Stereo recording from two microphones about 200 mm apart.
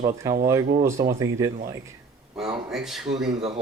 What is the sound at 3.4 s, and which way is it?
Speech, 30° right (ahead or behind).